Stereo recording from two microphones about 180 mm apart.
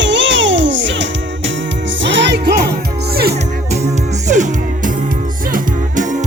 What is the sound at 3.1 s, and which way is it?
Music, 60° right (ahead or behind).